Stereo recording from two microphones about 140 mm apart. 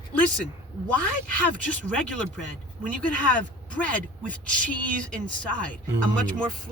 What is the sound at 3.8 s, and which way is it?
Speech, 10° left (ahead or behind).